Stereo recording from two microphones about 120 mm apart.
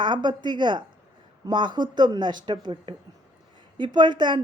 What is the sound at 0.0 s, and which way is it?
A woman's voice, 40° right (ahead or behind).